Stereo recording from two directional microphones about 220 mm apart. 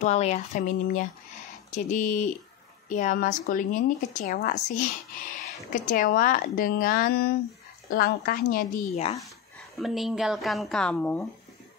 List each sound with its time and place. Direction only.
0.0 s a woman's voice: 30° left (ahead or behind)
9.8 s speech: centre (ahead or behind)